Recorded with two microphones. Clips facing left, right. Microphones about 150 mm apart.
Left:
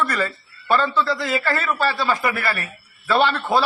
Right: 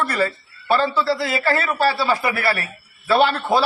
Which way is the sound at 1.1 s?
35° right (ahead or behind).